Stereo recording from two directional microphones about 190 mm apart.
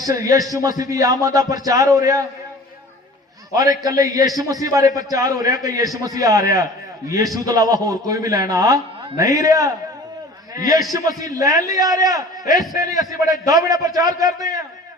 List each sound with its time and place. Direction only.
0.0 s a man's voice: 15° right (ahead or behind)
3.5 s a man's voice: 20° right (ahead or behind)